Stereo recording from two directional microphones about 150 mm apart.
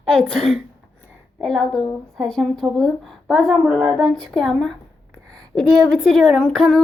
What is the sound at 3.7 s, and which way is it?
Speech, 10° right (ahead or behind).